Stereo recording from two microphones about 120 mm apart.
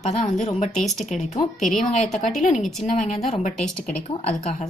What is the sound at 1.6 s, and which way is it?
Speech, centre (ahead or behind).